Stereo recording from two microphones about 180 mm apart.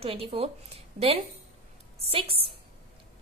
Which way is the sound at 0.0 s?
30° right (ahead or behind).